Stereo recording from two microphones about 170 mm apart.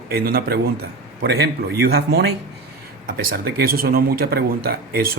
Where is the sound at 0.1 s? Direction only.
60° right (ahead or behind).